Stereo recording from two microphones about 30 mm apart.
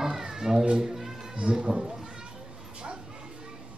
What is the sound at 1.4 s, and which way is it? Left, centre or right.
Speech, right.